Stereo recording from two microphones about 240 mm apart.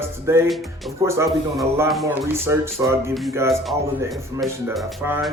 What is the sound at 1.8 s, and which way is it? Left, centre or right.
A man's voice, centre.